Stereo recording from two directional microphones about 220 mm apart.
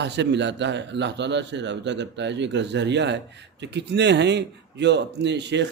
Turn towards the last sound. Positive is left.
turn(degrees=-50)  # may be behind; listen again after turning